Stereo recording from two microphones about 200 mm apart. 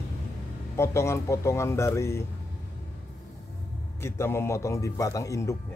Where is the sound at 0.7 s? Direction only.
15° left (ahead or behind).